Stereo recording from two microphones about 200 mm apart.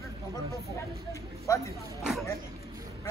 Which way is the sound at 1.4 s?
15° left (ahead or behind).